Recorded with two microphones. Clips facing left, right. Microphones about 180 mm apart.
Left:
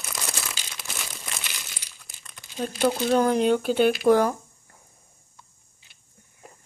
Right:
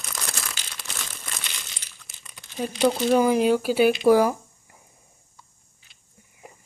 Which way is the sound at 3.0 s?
10° right (ahead or behind).